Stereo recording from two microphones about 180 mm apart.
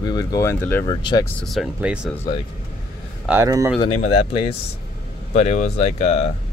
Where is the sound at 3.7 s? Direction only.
35° left (ahead or behind).